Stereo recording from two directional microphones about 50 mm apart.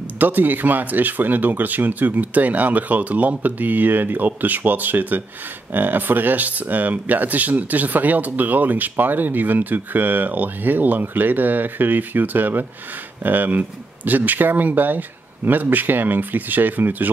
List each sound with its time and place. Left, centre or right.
0.2 s speech: right